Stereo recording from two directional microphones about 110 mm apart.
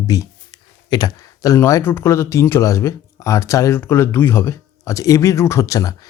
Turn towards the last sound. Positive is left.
turn(degrees=30)  # may be behind; listen again after turning